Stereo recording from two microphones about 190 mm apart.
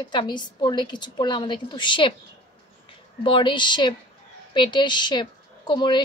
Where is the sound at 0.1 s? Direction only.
25° left (ahead or behind).